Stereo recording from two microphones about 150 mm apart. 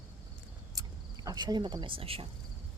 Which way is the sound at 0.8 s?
25° right (ahead or behind).